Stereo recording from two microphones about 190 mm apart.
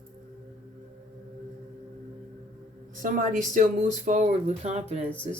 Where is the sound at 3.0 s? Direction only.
45° right (ahead or behind).